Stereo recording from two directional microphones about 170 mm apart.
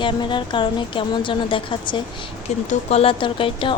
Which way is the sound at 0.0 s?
30° left (ahead or behind).